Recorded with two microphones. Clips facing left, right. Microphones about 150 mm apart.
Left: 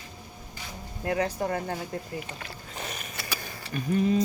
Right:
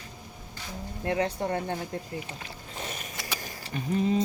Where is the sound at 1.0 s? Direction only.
25° right (ahead or behind).